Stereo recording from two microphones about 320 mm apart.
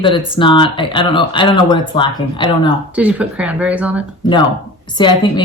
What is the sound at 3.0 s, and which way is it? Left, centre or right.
Speech, centre.